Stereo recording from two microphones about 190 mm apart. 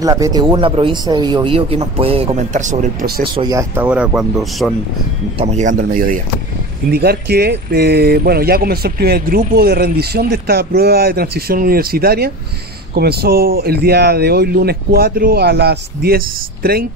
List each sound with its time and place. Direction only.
0.0 s speech: 15° right (ahead or behind); by 3.1 s 40° right (ahead or behind)
3.3 s speech: 20° right (ahead or behind); by 4.7 s centre (ahead or behind)
5.4 s speech: 35° right (ahead or behind)
6.9 s speech: 55° right (ahead or behind)